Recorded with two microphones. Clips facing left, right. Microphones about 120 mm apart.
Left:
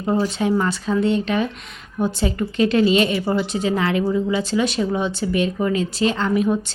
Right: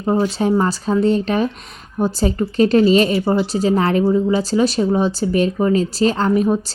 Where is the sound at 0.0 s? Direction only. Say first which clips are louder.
Right 3 dB; 25° right (ahead or behind).